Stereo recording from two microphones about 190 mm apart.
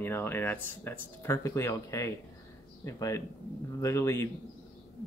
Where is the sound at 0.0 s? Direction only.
10° left (ahead or behind).